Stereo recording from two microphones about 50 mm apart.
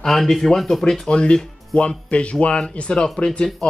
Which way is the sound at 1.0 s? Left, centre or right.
Centre.